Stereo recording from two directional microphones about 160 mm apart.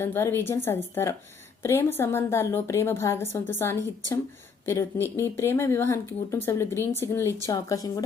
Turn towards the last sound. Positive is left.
turn(degrees=20)  # may be behind; listen again after turning